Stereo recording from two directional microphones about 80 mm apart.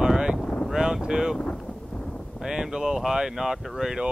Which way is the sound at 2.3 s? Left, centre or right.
Centre.